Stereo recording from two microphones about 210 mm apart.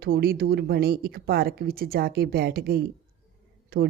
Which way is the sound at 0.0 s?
45° right (ahead or behind).